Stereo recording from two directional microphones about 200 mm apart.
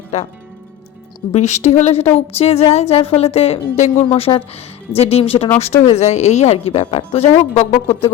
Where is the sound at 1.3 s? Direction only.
35° left (ahead or behind).